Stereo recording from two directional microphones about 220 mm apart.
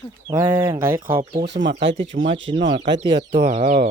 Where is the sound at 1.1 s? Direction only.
25° right (ahead or behind).